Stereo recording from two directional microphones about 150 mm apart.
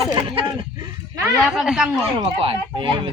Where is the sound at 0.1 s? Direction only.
30° right (ahead or behind).